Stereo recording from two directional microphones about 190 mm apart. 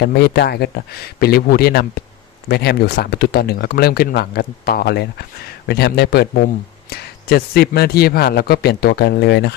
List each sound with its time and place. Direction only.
0.0 s speech: 60° left (ahead or behind)